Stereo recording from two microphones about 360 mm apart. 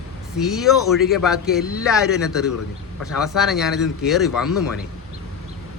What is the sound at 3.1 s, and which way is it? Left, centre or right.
Speech, centre.